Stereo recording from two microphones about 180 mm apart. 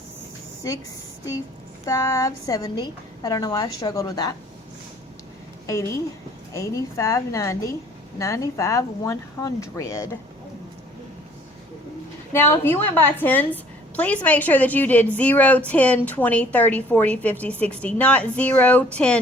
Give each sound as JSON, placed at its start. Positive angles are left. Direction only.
{"t": 1.8, "sound": "a woman's voice", "side_deg": 20}
{"t": 5.6, "sound": "a woman's voice", "side_deg": 15}
{"t": 12.3, "sound": "a woman's voice", "side_deg": 10}